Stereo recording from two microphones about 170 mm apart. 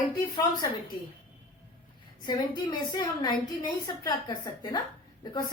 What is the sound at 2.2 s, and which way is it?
A woman's voice, 25° left (ahead or behind).